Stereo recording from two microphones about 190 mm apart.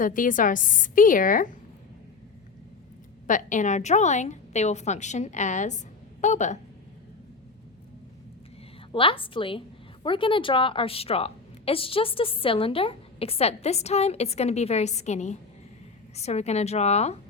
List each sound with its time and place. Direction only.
0.0 s a woman's voice: 45° left (ahead or behind)
3.2 s a woman's voice: 40° left (ahead or behind)
8.9 s a woman's voice: 25° left (ahead or behind)